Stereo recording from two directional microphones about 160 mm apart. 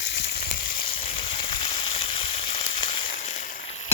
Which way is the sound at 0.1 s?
90° left.